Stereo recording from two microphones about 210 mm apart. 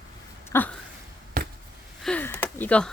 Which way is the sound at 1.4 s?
45° right (ahead or behind).